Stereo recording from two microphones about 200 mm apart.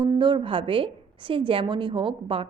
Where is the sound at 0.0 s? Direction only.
20° right (ahead or behind).